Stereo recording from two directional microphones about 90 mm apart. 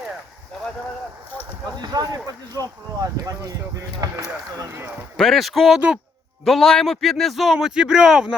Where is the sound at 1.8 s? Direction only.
50° right (ahead or behind).